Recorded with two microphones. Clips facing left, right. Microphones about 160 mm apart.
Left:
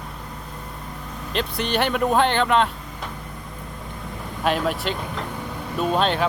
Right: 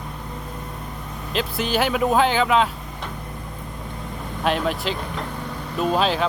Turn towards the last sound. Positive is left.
turn(degrees=0)  # may be behind; listen again after turning